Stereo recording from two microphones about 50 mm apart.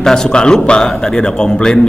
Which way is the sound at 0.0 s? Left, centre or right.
Centre.